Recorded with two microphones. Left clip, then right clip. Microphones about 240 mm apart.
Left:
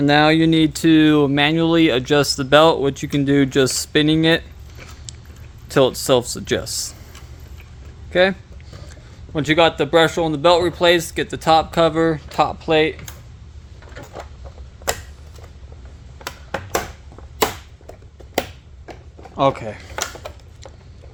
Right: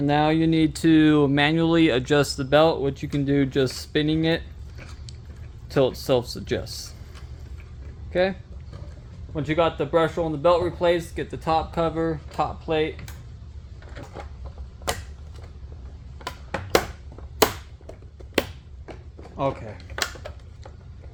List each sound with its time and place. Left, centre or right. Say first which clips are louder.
0.0 s speech: left 7 dB; centre
5.6 s speech: left 6 dB; centre
8.1 s speech: left 7 dB; left
9.3 s speech: left 7 dB; left
19.4 s speech: left 9 dB; left